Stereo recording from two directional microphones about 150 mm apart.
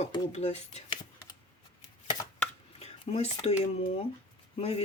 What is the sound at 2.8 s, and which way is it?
Speech, 45° left (ahead or behind).